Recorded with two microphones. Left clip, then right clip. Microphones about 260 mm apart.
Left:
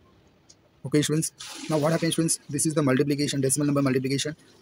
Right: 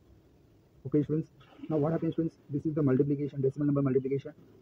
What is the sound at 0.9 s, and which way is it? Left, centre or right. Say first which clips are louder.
Speech: left 5 dB; left.